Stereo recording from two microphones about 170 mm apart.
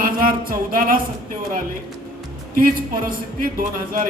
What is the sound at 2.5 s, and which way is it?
A man's voice, 60° right (ahead or behind).